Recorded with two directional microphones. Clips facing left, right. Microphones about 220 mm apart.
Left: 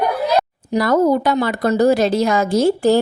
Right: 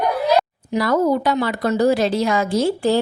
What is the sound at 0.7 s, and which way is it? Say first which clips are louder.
A woman's voice: left 3 dB; 45° left (ahead or behind).